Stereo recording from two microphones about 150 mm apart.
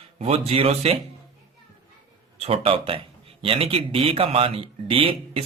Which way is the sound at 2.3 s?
40° right (ahead or behind).